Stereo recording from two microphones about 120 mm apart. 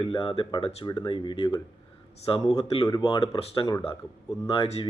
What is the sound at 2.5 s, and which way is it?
Speech, 50° left (ahead or behind).